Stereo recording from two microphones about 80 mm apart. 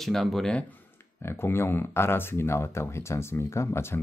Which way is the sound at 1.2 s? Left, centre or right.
Left.